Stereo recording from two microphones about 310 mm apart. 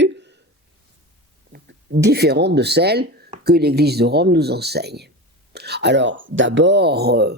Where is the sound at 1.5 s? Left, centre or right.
Right.